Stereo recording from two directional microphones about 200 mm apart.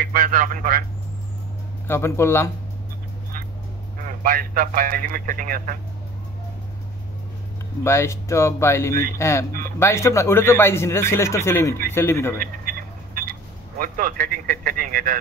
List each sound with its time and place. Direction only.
0.0 s speech: 45° right (ahead or behind)
1.9 s a man's voice: 15° left (ahead or behind)
4.2 s speech: 45° right (ahead or behind)
7.8 s a man's voice: 15° left (ahead or behind)
12.4 s speech: 45° right (ahead or behind)